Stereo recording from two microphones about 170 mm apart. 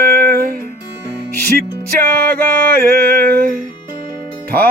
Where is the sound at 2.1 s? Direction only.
60° right (ahead or behind).